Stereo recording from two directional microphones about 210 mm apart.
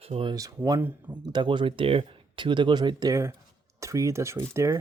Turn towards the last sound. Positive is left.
turn(degrees=-10)  # may be behind; listen again after turning